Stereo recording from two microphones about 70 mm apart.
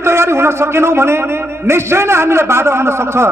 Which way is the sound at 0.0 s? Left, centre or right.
Right.